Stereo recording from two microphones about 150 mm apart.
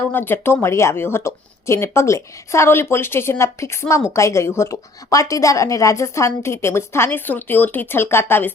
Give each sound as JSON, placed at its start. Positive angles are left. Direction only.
{"t": 0.1, "sound": "a woman's voice", "side_deg": 15}